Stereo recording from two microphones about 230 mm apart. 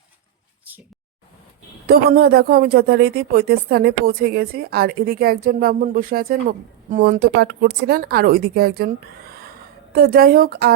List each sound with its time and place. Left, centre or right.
1.9 s speech: right
9.9 s speech: right